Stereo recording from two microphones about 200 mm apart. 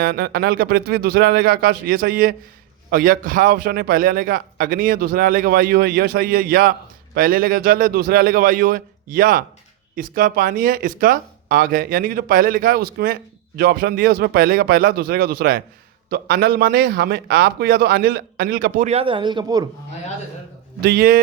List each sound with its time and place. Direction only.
0.0 s a man's voice: 50° right (ahead or behind); by 19.6 s 20° right (ahead or behind)
20.8 s a man's voice: 50° right (ahead or behind)